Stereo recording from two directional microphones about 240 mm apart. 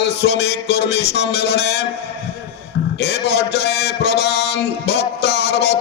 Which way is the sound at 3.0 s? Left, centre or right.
Left.